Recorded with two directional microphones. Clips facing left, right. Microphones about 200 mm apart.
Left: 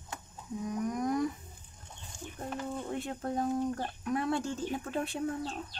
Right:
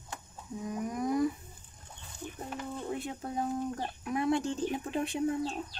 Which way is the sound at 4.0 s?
10° right (ahead or behind).